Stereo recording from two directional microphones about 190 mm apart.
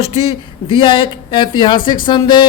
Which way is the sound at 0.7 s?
25° left (ahead or behind).